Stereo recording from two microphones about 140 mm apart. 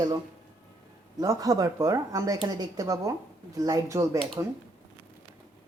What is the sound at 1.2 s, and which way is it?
Speech, 25° right (ahead or behind).